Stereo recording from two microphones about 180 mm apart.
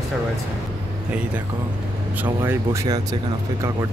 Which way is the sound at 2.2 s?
15° right (ahead or behind).